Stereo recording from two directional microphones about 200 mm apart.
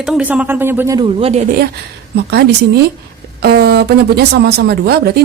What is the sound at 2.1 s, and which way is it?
A woman's voice, 55° right (ahead or behind).